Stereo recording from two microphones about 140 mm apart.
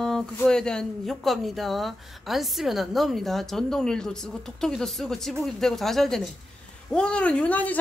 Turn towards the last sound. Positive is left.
turn(degrees=10)  # may be behind; listen again after turning